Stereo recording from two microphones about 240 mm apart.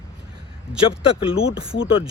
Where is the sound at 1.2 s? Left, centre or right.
Left.